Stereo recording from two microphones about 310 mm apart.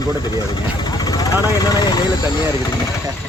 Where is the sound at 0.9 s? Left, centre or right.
Centre.